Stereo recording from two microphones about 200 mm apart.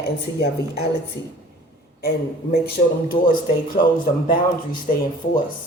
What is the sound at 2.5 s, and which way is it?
A woman's voice, 50° left (ahead or behind).